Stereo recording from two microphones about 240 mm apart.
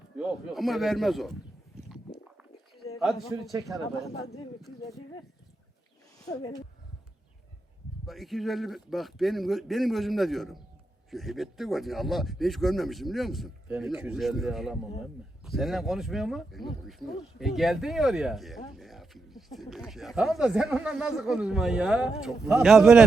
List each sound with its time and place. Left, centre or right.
0.2 s speech: centre
3.0 s speech: centre
6.2 s speech: centre
8.0 s speech: centre